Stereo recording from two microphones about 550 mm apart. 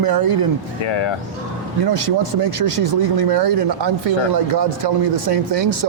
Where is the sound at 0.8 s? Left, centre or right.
Left.